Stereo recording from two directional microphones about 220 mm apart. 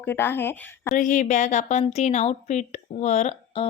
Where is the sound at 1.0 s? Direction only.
35° left (ahead or behind).